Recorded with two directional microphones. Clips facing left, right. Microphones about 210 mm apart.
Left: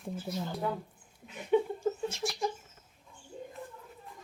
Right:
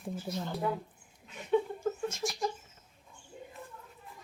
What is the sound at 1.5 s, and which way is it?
Chuckle, 15° left (ahead or behind).